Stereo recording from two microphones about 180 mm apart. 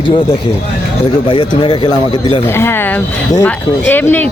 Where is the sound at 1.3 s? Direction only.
25° left (ahead or behind).